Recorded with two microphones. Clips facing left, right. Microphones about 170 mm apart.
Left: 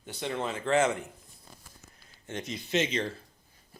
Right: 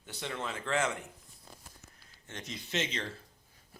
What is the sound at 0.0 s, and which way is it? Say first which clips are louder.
Speech: left 6 dB; 25° left (ahead or behind).